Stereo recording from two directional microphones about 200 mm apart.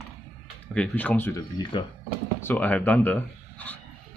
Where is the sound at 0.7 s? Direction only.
5° left (ahead or behind).